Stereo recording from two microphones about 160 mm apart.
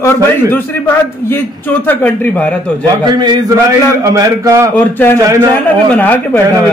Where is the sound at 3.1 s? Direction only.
25° right (ahead or behind).